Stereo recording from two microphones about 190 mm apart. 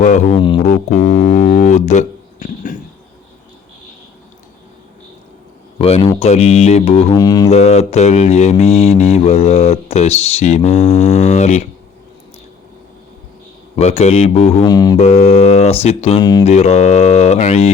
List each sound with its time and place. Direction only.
0.0 s mantra: 40° left (ahead or behind)
0.3 s music: 25° left (ahead or behind)
0.6 s mantra: 40° left (ahead or behind)
1.2 s speech: 40° left (ahead or behind)
5.8 s mantra: 30° left (ahead or behind)
7.2 s music: 20° left (ahead or behind)
7.5 s mantra: 35° left (ahead or behind)
13.7 s mantra: 35° left (ahead or behind)
14.7 s music: 20° left (ahead or behind)
14.9 s mantra: 35° left (ahead or behind)